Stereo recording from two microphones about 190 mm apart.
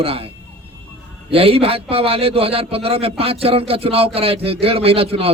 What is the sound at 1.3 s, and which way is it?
A man's voice, 30° right (ahead or behind).